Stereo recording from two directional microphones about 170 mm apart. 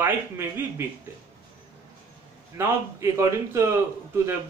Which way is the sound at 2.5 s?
15° right (ahead or behind).